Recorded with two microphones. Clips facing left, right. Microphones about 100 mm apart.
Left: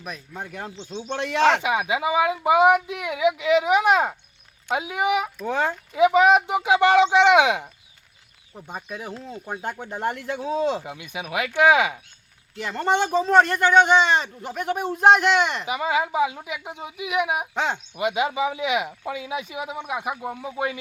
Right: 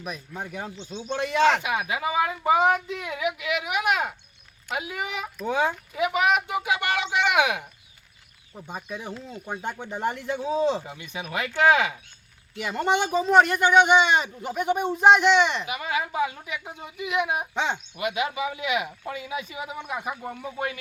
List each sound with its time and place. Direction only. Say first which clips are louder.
0.0 s speech: even; centre (ahead or behind)
1.6 s a woman's voice: left 4 dB; 20° left (ahead or behind)
4.8 s a woman's voice: left 10 dB; 20° left (ahead or behind)
5.4 s speech: even; 5° right (ahead or behind)
6.0 s speech: left 7 dB; 25° left (ahead or behind)
8.5 s speech: left 1 dB; 5° left (ahead or behind)
12.5 s speech: left 2 dB; 10° right (ahead or behind)
15.6 s a woman's voice: left 5 dB; 25° left (ahead or behind); by 17.7 s centre (ahead or behind)
17.9 s a woman's voice: left 4 dB; 25° left (ahead or behind)